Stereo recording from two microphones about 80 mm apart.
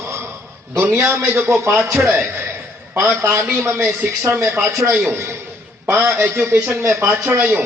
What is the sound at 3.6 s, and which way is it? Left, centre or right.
A man's voice, right.